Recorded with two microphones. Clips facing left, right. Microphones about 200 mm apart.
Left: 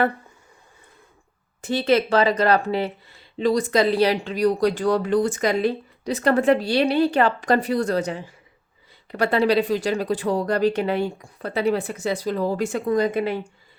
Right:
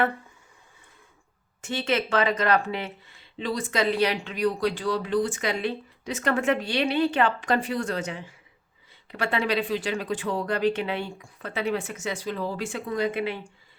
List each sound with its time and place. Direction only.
1.6 s speech: 35° left (ahead or behind)